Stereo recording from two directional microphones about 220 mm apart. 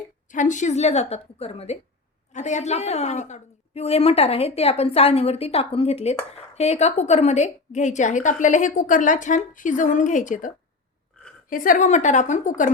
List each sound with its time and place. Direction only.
0.3 s a woman's voice: 35° left (ahead or behind)